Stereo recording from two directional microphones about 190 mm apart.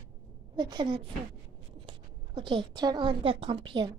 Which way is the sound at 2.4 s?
25° right (ahead or behind).